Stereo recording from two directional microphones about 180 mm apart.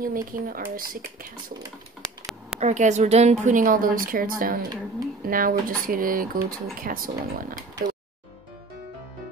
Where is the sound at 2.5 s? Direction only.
40° right (ahead or behind).